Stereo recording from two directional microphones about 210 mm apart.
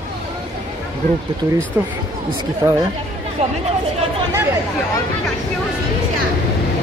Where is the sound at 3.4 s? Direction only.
30° right (ahead or behind).